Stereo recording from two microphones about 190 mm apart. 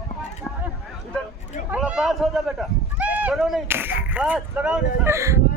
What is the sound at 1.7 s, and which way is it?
Speech, 5° right (ahead or behind).